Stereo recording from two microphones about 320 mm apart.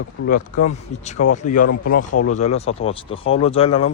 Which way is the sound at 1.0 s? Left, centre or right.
Left.